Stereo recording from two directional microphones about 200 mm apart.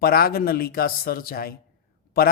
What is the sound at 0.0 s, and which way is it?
Speech, 50° left (ahead or behind).